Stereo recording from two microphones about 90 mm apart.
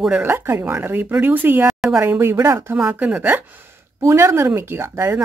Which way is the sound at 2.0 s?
25° right (ahead or behind).